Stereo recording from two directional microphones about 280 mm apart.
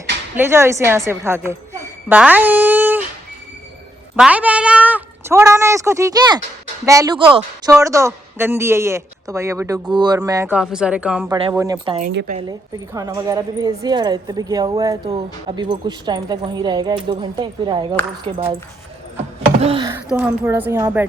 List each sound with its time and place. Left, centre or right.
0.3 s a woman's voice: centre
4.2 s a woman's voice: centre
12.0 s a woman's voice: right
12.4 s a woman's voice: centre
19.6 s a woman's voice: centre